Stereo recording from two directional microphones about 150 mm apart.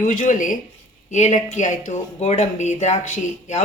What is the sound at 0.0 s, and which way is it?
Speech, 55° left (ahead or behind).